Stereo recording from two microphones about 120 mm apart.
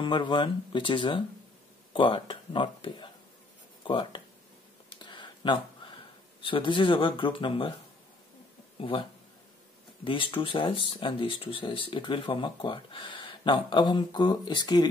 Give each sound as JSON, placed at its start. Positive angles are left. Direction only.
{"t": 0.0, "sound": "speech", "side_deg": 45}
{"t": 4.8, "sound": "a sound", "side_deg": 40}
{"t": 6.4, "sound": "speech", "side_deg": 45}
{"t": 10.0, "sound": "speech", "side_deg": 45}